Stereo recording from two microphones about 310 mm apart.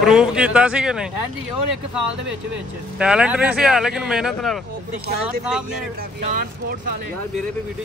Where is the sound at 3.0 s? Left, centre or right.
Centre.